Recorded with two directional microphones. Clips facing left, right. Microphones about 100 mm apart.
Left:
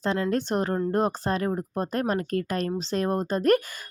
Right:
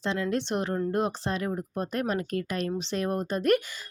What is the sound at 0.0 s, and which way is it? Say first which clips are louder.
A woman's voice: left 3 dB; 40° left (ahead or behind).